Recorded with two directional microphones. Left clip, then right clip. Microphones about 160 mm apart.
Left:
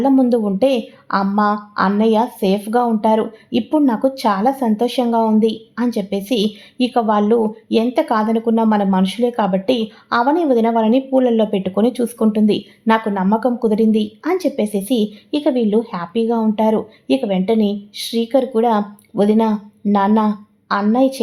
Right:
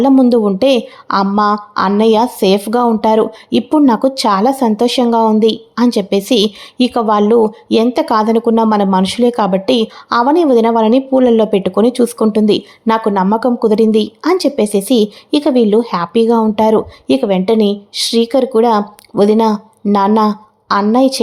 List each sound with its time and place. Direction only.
0.0 s a woman's voice: 30° right (ahead or behind)